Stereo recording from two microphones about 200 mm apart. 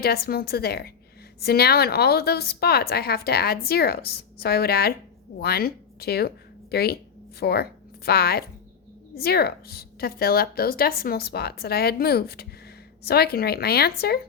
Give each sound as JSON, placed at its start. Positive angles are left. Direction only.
{"t": 0.0, "sound": "a woman's voice", "side_deg": 50}